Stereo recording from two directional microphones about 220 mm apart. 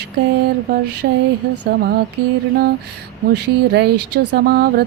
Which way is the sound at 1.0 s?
45° right (ahead or behind).